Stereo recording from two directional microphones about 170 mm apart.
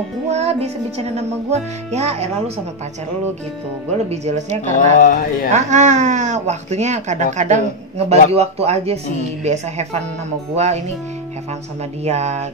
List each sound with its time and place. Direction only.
0.3 s music: 40° right (ahead or behind)
4.1 s music: 40° right (ahead or behind)
4.7 s speech: 50° left (ahead or behind)
5.5 s speech: 45° right (ahead or behind)
8.1 s music: 35° right (ahead or behind)
12.0 s music: 40° right (ahead or behind)